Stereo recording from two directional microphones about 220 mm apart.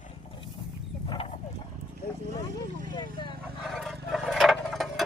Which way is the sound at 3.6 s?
Centre (ahead or behind).